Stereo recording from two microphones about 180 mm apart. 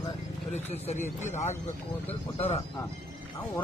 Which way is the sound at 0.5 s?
35° left (ahead or behind).